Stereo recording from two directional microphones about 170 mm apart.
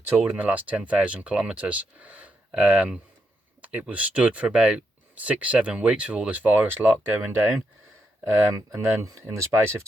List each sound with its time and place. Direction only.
0.2 s speech: 10° right (ahead or behind)
8.7 s speech: 20° right (ahead or behind)